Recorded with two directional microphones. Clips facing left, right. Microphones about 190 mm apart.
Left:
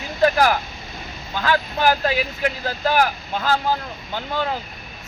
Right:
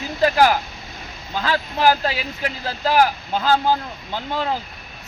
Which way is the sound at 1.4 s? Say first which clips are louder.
Right 1 dB; 30° right (ahead or behind).